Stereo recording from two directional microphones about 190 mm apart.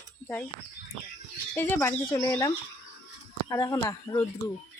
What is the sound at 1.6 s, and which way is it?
Speech, 10° left (ahead or behind).